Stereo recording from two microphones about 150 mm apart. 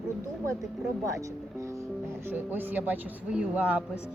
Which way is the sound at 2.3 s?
15° right (ahead or behind).